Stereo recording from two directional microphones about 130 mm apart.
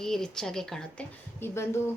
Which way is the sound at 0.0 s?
5° left (ahead or behind).